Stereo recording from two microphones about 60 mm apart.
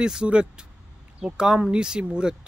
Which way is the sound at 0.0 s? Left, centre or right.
Centre.